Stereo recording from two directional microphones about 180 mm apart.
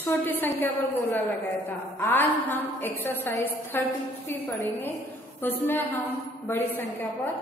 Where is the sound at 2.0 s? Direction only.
10° left (ahead or behind).